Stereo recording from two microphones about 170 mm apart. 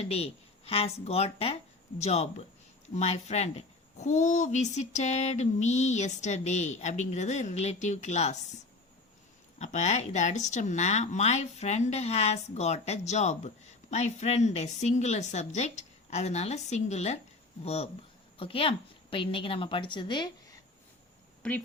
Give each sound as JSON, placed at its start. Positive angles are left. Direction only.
{"t": 0.0, "sound": "a woman's voice", "side_deg": 35}
{"t": 9.6, "sound": "a woman's voice", "side_deg": 45}
{"t": 21.4, "sound": "a woman's voice", "side_deg": 5}